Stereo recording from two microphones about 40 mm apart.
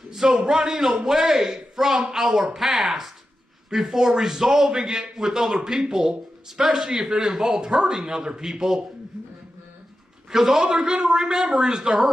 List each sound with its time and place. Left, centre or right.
0.1 s a man's voice: centre
10.3 s a man's voice: centre